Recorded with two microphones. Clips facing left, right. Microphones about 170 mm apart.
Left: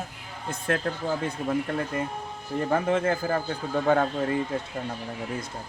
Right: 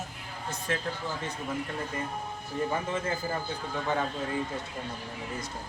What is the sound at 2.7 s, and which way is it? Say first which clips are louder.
Speech: left 7 dB; 65° left (ahead or behind).